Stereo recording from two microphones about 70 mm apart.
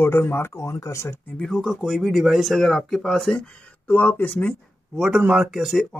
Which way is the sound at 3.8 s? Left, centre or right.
Left.